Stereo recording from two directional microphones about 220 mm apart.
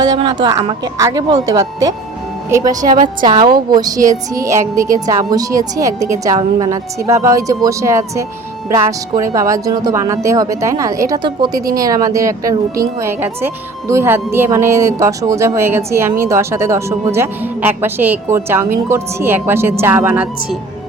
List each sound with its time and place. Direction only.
0.0 s speech: 20° right (ahead or behind)
2.9 s a woman's voice: 40° right (ahead or behind)
3.2 s a woman's voice: 20° right (ahead or behind)